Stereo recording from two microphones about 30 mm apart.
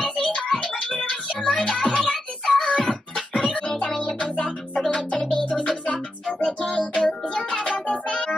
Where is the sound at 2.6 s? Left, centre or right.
Left.